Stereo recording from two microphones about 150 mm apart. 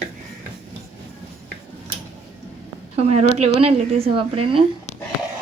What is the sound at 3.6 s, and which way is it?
A woman's voice, 40° right (ahead or behind).